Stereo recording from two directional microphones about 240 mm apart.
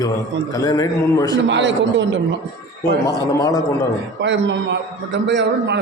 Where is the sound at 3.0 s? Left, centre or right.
Centre.